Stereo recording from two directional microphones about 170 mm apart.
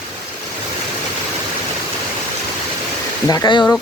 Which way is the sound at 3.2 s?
25° left (ahead or behind).